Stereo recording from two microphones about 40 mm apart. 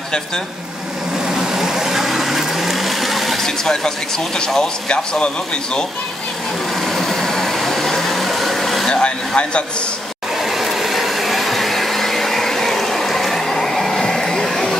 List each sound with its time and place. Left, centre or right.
1.2 s vehicle: centre
3.4 s speech: centre
6.9 s vehicle: centre
8.8 s a sound: left
10.4 s vacuum cleaner: centre